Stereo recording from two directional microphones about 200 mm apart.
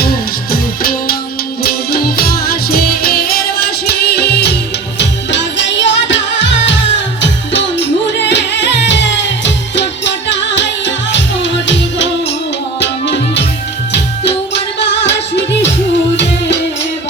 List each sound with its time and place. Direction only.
0.5 s music: 45° left (ahead or behind)